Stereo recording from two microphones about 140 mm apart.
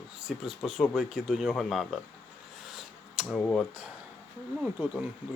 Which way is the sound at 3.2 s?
10° left (ahead or behind).